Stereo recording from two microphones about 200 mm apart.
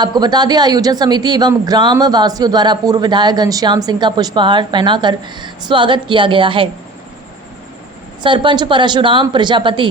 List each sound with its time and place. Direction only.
0.0 s speech: 20° right (ahead or behind)
8.2 s speech: 25° right (ahead or behind)